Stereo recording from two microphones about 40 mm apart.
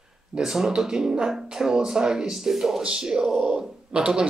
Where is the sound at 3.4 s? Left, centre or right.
Right.